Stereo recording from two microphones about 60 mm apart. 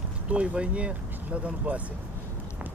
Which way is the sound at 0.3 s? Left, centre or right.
Centre.